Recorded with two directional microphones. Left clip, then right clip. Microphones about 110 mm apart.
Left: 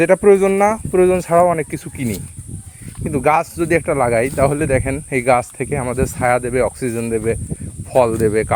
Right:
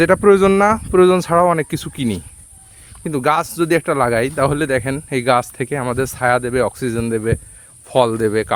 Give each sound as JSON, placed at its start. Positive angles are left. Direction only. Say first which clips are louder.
{"t": 0.0, "sound": "speech", "louder": "even", "side_deg": -35}
{"t": 0.9, "sound": "speech", "louder": "right 2 dB", "side_deg": -60}
{"t": 1.2, "sound": "speech", "louder": "left 1 dB", "side_deg": -40}
{"t": 5.5, "sound": "speech", "louder": "even", "side_deg": -40}
{"t": 6.0, "sound": "speech", "louder": "even", "side_deg": -25}
{"t": 6.9, "sound": "speech", "louder": "even", "side_deg": -35}